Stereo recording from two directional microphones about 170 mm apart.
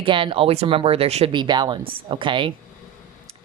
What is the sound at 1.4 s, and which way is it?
Speech, 25° right (ahead or behind).